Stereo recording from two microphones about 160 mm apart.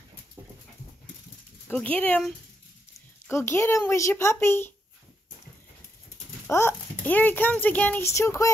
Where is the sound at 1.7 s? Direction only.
10° left (ahead or behind).